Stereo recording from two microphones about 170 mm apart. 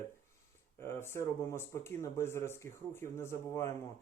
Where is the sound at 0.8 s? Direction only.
15° left (ahead or behind).